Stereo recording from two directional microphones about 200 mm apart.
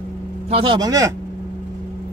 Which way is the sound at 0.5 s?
20° right (ahead or behind).